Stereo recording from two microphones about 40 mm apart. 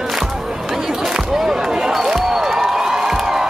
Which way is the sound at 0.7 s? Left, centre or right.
Centre.